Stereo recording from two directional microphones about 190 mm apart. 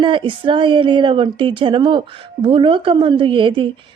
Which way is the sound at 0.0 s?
25° right (ahead or behind).